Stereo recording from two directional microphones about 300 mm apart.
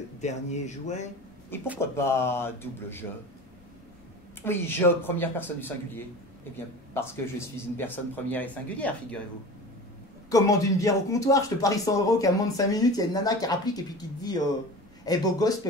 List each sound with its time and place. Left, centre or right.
0.2 s a man's voice: left
1.8 s speech: centre
4.4 s a man's voice: centre
10.3 s speech: centre